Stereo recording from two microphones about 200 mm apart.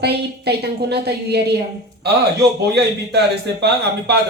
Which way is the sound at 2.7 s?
55° right (ahead or behind).